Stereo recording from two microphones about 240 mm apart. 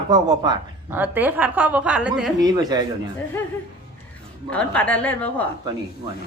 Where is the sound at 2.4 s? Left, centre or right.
Centre.